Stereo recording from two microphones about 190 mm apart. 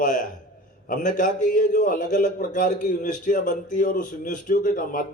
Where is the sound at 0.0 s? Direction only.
45° left (ahead or behind).